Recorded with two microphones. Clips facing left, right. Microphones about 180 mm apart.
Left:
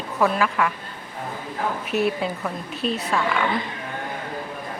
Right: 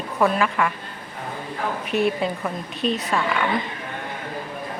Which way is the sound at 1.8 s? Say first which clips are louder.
Right 2 dB; 5° left (ahead or behind).